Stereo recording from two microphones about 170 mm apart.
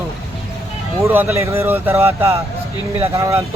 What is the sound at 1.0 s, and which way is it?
Speech, 15° right (ahead or behind).